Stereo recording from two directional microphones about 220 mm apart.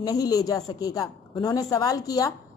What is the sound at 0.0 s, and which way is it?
A woman's voice, 15° left (ahead or behind).